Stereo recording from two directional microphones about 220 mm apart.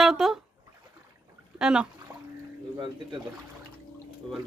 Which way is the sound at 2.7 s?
20° right (ahead or behind).